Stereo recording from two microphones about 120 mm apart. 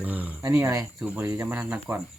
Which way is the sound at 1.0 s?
15° right (ahead or behind).